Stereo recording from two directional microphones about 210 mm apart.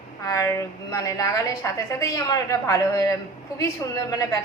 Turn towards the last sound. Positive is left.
turn(degrees=15)  # may be behind; listen again after turning